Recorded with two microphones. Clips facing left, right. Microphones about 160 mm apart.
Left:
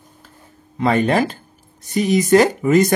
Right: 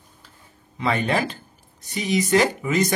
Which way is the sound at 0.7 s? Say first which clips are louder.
Left 6 dB; 45° left (ahead or behind).